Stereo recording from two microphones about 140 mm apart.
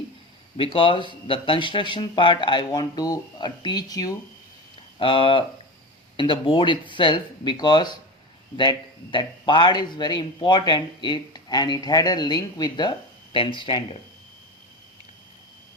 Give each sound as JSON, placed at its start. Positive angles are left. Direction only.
{"t": 0.5, "sound": "speech", "side_deg": 40}
{"t": 4.9, "sound": "speech", "side_deg": 40}
{"t": 9.1, "sound": "speech", "side_deg": 35}